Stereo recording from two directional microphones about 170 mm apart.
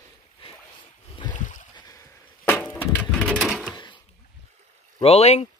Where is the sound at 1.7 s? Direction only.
20° left (ahead or behind); by 3.8 s centre (ahead or behind).